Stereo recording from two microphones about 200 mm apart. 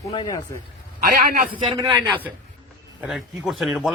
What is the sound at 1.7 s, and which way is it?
Speech, 20° right (ahead or behind).